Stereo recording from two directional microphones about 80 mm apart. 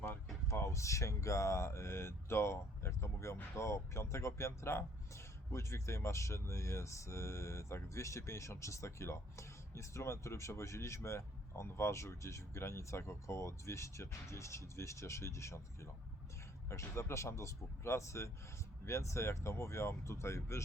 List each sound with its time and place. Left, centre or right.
0.4 s speech: left